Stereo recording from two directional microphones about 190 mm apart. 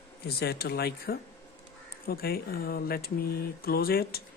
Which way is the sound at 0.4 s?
55° left (ahead or behind).